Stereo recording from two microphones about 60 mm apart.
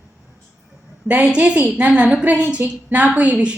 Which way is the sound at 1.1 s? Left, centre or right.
Right.